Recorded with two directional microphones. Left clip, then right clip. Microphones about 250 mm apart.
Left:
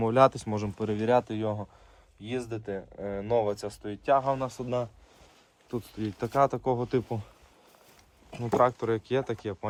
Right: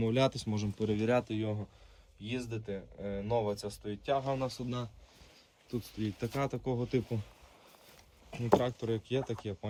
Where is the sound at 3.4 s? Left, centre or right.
Left.